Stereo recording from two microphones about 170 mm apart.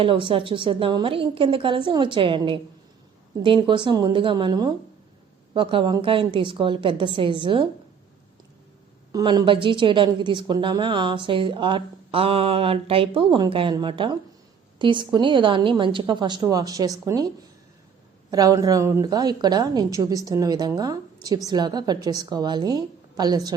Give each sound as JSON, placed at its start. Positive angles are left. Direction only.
{"t": 0.0, "sound": "a woman's voice", "side_deg": -30}
{"t": 9.1, "sound": "a woman's voice", "side_deg": -25}